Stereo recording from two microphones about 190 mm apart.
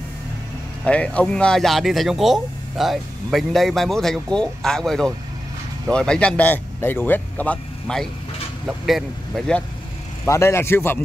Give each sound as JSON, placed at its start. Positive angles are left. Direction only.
{"t": 0.8, "sound": "speech", "side_deg": 5}
{"t": 10.2, "sound": "speech", "side_deg": 15}